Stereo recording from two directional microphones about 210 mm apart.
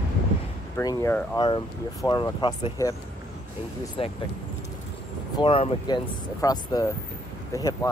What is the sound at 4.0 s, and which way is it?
Speech, 25° left (ahead or behind).